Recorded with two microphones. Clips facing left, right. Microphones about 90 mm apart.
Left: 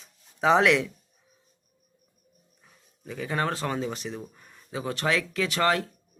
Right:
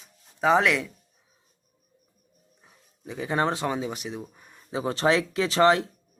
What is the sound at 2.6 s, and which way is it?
Speech, 20° right (ahead or behind).